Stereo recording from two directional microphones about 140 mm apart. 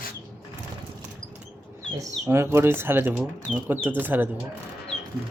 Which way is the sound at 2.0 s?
20° right (ahead or behind).